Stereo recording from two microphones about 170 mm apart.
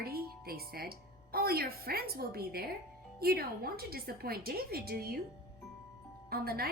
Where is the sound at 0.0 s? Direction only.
65° right (ahead or behind).